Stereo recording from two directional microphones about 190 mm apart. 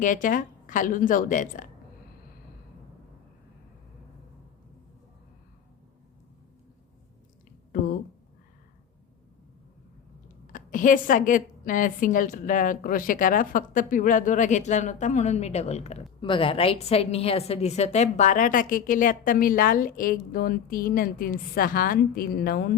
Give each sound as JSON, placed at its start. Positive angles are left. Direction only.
{"t": 0.0, "sound": "a woman's voice", "side_deg": 45}
{"t": 10.4, "sound": "a woman's voice", "side_deg": 45}